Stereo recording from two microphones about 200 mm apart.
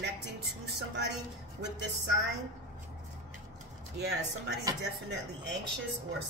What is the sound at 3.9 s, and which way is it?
Speech, 60° right (ahead or behind).